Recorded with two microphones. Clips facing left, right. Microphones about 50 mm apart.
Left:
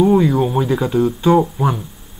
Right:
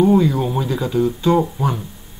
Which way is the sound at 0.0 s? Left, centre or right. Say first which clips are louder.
Left 2 dB; centre.